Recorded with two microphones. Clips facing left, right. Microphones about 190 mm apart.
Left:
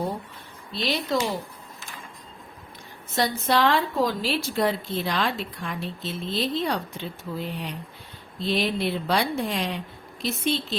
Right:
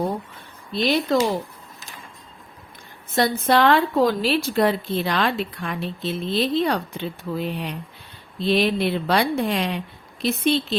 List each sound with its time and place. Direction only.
0.7 s speech: 50° right (ahead or behind)
3.2 s a woman's voice: 55° right (ahead or behind)